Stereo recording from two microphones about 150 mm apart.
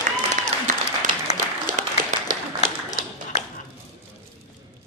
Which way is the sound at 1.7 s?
65° right (ahead or behind).